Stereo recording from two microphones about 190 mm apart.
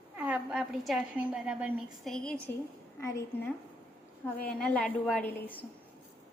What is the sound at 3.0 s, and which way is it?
Speech, 15° left (ahead or behind).